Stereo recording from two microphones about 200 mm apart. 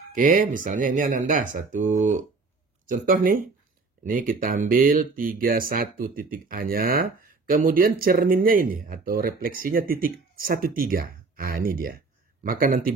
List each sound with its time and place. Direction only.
0.1 s speech: 40° right (ahead or behind)